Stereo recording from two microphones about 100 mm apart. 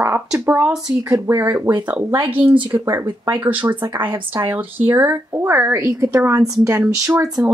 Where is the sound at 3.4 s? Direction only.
20° right (ahead or behind).